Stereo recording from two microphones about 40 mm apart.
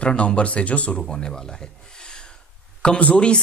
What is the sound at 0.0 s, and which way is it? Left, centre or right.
Speech, left.